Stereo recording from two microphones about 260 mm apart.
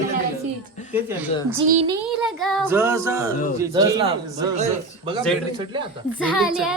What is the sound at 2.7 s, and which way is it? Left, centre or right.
A man's voice, centre.